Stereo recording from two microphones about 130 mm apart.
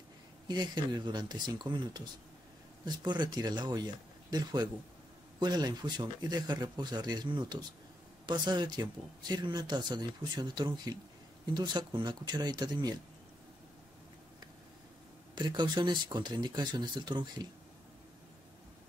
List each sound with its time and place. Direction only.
0.5 s speech: 30° right (ahead or behind)
15.3 s speech: 35° right (ahead or behind)